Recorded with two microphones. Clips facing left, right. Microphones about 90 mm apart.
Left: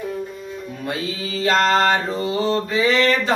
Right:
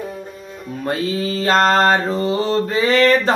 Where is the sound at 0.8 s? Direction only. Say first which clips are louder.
Right 7 dB; 40° right (ahead or behind).